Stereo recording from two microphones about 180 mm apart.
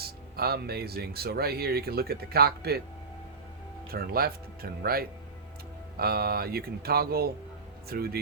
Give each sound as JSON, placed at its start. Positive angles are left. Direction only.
{"t": 0.0, "sound": "speech", "side_deg": -60}
{"t": 3.9, "sound": "speech", "side_deg": -55}